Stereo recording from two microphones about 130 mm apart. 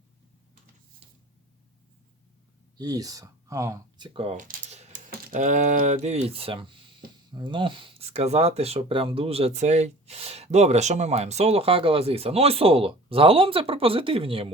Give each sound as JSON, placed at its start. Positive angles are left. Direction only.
{"t": 2.7, "sound": "speech", "side_deg": -30}
{"t": 3.9, "sound": "speech", "side_deg": -40}
{"t": 4.7, "sound": "speech", "side_deg": -75}